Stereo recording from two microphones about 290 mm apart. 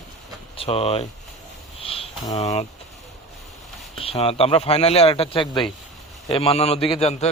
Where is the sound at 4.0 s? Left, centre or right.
Centre.